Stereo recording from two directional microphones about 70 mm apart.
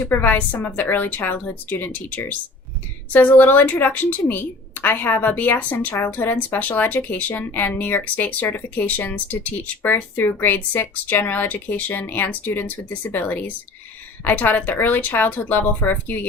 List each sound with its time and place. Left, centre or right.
0.1 s speech: left